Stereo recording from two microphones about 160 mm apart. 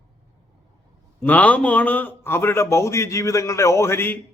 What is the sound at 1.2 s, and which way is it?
A man's voice, 10° left (ahead or behind).